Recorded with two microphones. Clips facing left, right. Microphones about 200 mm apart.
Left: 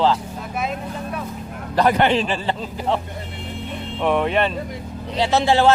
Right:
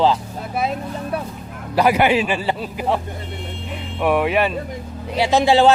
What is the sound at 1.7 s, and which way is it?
A man's voice, 10° right (ahead or behind).